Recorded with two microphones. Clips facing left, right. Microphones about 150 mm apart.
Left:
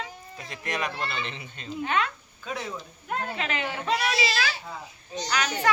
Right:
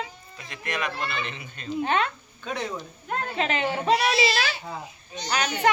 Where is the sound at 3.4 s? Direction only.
25° right (ahead or behind).